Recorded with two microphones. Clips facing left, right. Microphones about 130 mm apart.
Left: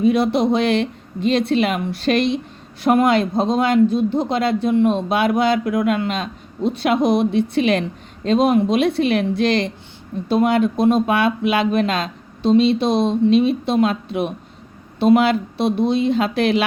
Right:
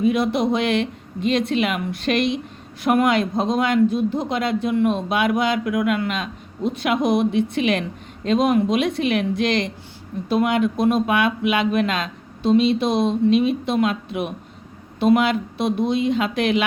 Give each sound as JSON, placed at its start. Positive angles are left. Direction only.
{"t": 0.0, "sound": "speech", "side_deg": 30}